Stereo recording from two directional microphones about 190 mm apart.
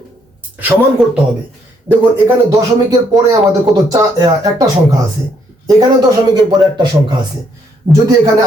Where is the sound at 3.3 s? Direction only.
20° right (ahead or behind).